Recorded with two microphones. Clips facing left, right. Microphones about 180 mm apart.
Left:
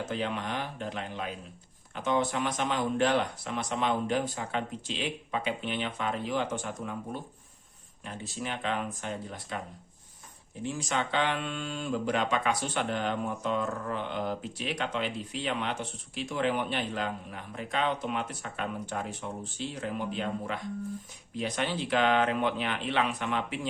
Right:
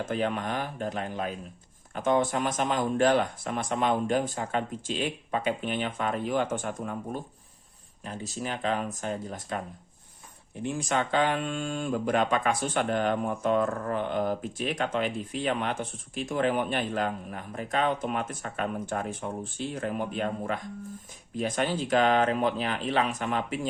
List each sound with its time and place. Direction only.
0.0 s speech: 50° right (ahead or behind)
10.6 s speech: 55° right (ahead or behind)